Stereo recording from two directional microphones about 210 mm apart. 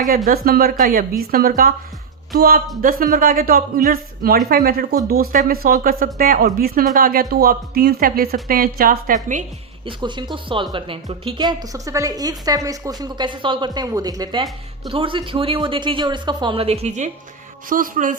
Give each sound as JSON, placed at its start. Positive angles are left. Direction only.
{"t": 0.3, "sound": "speech", "side_deg": -45}
{"t": 9.8, "sound": "a woman's voice", "side_deg": -20}